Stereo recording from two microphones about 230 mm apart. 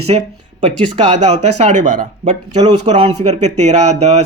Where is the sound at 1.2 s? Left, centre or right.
Right.